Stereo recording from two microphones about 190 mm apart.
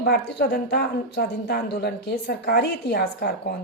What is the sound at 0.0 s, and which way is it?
A woman's voice, 60° left (ahead or behind).